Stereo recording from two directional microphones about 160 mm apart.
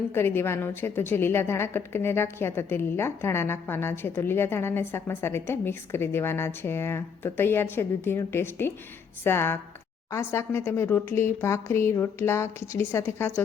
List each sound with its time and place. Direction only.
0.1 s a woman's voice: 15° left (ahead or behind)